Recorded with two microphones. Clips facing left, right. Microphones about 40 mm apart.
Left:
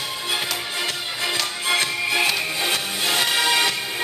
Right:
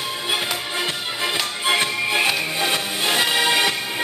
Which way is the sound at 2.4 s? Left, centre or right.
Centre.